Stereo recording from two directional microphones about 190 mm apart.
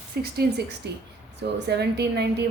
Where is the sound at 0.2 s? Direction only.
55° right (ahead or behind).